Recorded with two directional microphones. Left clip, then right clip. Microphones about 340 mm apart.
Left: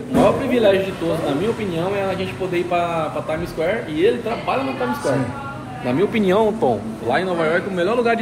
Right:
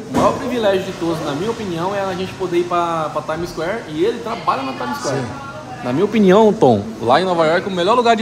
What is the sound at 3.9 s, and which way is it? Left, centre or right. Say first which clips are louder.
Speech: even; centre.